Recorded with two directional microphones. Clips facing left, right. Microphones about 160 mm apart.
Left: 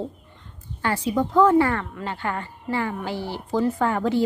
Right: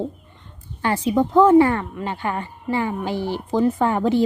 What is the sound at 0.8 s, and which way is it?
A woman's voice, 20° right (ahead or behind).